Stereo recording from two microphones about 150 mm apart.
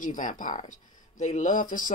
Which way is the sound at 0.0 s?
60° left (ahead or behind).